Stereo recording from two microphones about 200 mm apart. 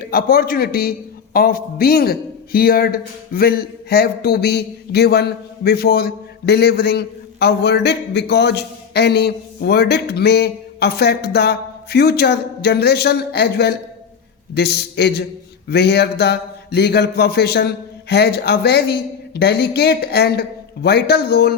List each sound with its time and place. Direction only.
0.0 s a man's voice: 50° left (ahead or behind)